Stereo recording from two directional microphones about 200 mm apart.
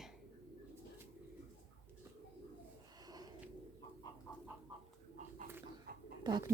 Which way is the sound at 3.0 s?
20° right (ahead or behind).